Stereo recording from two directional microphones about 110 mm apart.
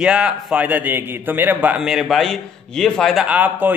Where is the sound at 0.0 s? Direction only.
10° right (ahead or behind).